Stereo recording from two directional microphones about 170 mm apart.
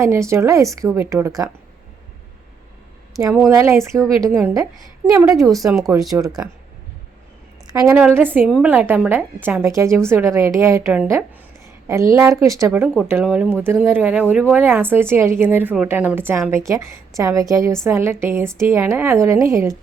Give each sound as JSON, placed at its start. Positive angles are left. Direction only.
{"t": 0.0, "sound": "a woman's voice", "side_deg": -15}
{"t": 3.3, "sound": "speech", "side_deg": -5}
{"t": 4.2, "sound": "speech", "side_deg": -15}
{"t": 5.5, "sound": "speech", "side_deg": 0}
{"t": 6.1, "sound": "a woman's voice", "side_deg": -20}
{"t": 7.7, "sound": "a woman's voice", "side_deg": -20}
{"t": 7.9, "sound": "a woman's voice", "side_deg": -10}